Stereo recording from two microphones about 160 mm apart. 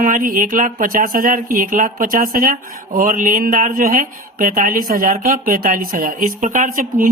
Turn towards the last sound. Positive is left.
turn(degrees=-55)  # may be behind; listen again after turning